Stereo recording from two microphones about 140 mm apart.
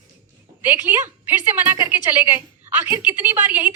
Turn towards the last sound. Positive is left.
turn(degrees=-15)  # may be behind; listen again after turning